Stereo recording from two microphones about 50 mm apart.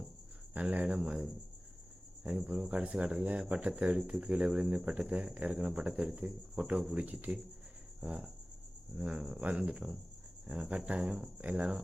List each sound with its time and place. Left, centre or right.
0.5 s speech: right
0.9 s speech: centre
2.4 s speech: centre
2.6 s speech: right
6.9 s speech: right
8.0 s speech: centre
11.3 s speech: right